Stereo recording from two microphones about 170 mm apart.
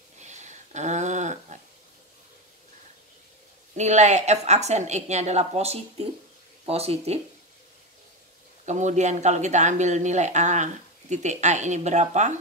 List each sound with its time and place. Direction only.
0.2 s a sound: 45° right (ahead or behind)
3.7 s a woman's voice: 45° right (ahead or behind)
8.6 s a woman's voice: 45° right (ahead or behind)